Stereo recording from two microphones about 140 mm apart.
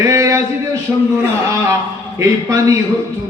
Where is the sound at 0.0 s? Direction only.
25° right (ahead or behind).